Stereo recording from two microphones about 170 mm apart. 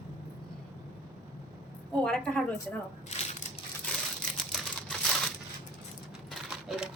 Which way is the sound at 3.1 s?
40° left (ahead or behind).